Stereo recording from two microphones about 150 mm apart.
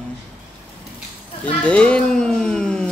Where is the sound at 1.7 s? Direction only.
10° left (ahead or behind).